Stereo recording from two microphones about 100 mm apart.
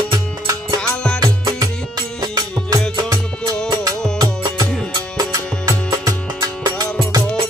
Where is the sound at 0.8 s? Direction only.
10° left (ahead or behind).